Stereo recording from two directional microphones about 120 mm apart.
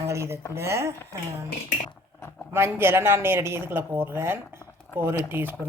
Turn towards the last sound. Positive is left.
turn(degrees=-20)  # may be behind; listen again after turning